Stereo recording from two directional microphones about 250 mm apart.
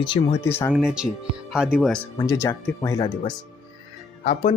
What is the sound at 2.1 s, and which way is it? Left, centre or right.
Speech, centre.